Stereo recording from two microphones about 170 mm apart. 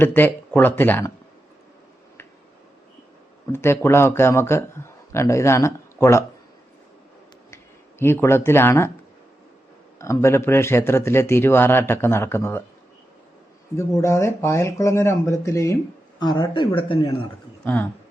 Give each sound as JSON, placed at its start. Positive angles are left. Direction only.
{"t": 0.0, "sound": "speech", "side_deg": 10}
{"t": 3.5, "sound": "speech", "side_deg": 15}
{"t": 7.5, "sound": "speech", "side_deg": 15}
{"t": 10.0, "sound": "speech", "side_deg": 15}
{"t": 13.7, "sound": "speech", "side_deg": 15}